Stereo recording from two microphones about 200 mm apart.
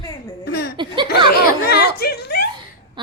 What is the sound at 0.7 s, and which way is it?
Speech, 25° right (ahead or behind).